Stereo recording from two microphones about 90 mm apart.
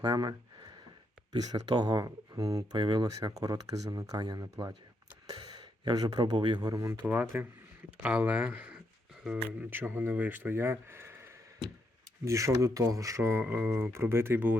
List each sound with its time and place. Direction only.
0.0 s speech: 45° right (ahead or behind)
2.7 s speech: 55° right (ahead or behind)
3.1 s speech: 40° right (ahead or behind)
5.3 s gasp: 45° right (ahead or behind)
6.3 s speech: 60° right (ahead or behind); by 6.9 s 40° right (ahead or behind)
7.0 s speech: 15° right (ahead or behind)
9.6 s speech: 25° right (ahead or behind)